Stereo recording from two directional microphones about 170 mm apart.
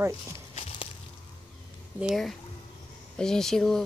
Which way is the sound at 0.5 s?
35° left (ahead or behind).